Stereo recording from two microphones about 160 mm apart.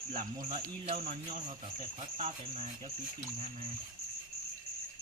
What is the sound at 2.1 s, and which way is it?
Speech, 45° right (ahead or behind).